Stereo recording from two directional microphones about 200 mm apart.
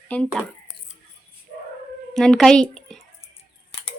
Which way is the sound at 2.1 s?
5° left (ahead or behind).